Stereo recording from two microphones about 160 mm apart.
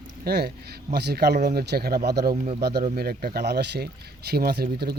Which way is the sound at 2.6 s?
90° right.